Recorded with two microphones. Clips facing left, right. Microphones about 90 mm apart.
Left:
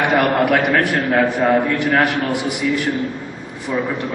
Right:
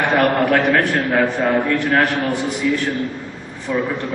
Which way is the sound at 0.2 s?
15° left (ahead or behind).